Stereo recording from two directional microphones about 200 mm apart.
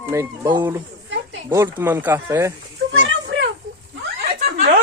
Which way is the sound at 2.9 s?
65° right (ahead or behind).